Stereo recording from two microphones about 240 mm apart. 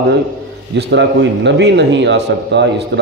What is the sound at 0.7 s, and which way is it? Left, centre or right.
A man's voice, right.